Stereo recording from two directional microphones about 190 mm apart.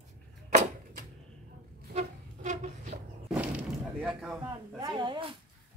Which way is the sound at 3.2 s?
5° right (ahead or behind).